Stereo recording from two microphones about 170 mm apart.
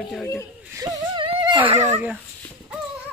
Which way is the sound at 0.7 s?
20° right (ahead or behind).